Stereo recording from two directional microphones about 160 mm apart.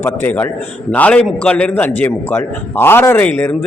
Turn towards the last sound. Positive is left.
turn(degrees=15)  # may be behind; listen again after turning